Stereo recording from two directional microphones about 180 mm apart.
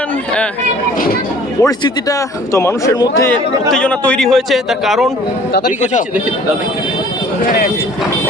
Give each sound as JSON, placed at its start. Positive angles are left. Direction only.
{"t": 1.6, "sound": "a man's voice", "side_deg": 20}
{"t": 3.7, "sound": "a man's voice", "side_deg": 5}